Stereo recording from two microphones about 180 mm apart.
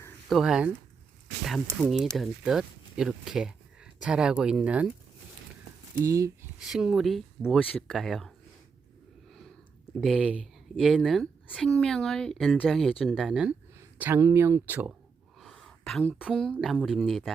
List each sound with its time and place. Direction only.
0.3 s speech: centre (ahead or behind)
1.8 s speech: centre (ahead or behind)
6.0 s speech: 15° right (ahead or behind)
6.6 s speech: 5° right (ahead or behind)
10.0 s speech: 5° right (ahead or behind)
14.0 s speech: 15° right (ahead or behind)
15.4 s a woman's voice: centre (ahead or behind)